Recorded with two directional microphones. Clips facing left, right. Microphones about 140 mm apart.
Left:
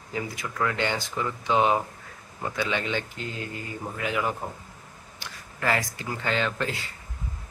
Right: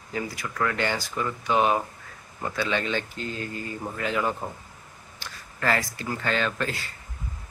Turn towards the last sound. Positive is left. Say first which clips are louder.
# even
turn(degrees=20)  # may be behind; listen again after turning